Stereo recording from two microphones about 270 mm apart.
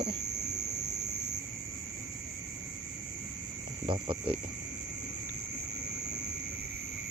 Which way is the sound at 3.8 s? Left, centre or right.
Centre.